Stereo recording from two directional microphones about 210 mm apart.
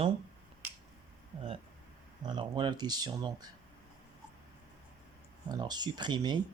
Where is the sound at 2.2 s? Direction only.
20° right (ahead or behind).